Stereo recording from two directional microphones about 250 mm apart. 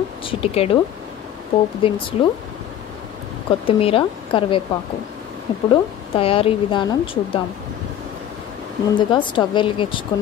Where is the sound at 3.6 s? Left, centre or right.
Left.